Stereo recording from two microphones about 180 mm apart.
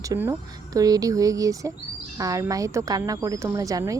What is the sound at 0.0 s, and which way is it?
Speech, 15° right (ahead or behind).